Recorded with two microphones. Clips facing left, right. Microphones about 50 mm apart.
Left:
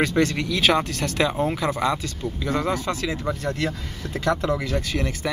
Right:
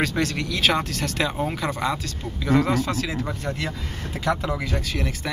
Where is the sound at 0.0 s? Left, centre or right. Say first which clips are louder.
Left 3 dB; centre.